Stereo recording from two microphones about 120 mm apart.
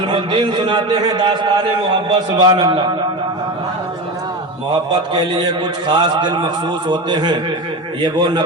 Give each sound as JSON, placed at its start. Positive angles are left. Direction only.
{"t": 0.1, "sound": "a man's voice", "side_deg": -45}
{"t": 4.7, "sound": "a man's voice", "side_deg": -40}